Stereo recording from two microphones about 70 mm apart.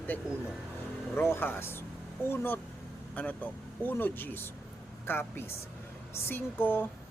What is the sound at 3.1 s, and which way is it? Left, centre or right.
Speech, left.